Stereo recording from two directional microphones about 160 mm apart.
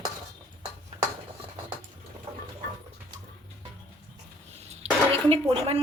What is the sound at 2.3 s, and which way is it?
Water, 40° right (ahead or behind).